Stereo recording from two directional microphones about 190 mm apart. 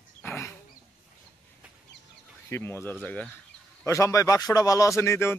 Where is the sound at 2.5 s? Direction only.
15° left (ahead or behind).